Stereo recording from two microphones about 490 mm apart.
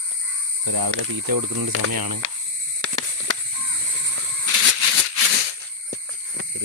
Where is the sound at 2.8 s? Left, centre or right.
Right.